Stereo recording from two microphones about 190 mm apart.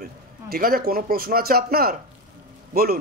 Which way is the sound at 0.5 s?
50° right (ahead or behind).